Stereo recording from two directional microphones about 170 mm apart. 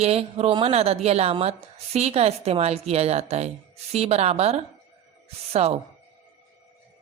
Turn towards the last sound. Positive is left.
turn(degrees=-35)  # may be behind; listen again after turning